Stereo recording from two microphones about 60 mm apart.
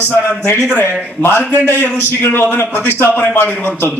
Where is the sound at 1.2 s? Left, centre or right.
Left.